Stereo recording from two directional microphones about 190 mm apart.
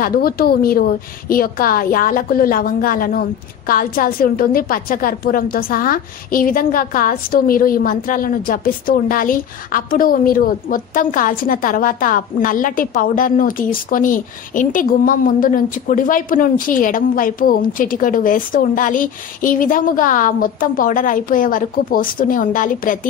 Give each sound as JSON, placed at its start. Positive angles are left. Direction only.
{"t": 0.0, "sound": "a woman's voice", "side_deg": 50}